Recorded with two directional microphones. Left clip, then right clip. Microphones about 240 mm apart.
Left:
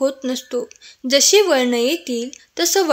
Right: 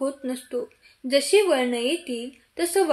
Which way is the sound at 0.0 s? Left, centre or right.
Left.